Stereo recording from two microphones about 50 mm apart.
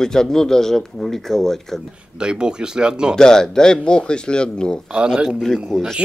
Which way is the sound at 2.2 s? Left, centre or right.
Centre.